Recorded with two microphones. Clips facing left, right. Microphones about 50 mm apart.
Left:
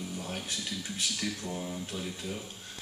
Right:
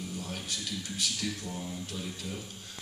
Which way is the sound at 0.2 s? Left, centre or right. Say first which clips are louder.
Left 1 dB; centre.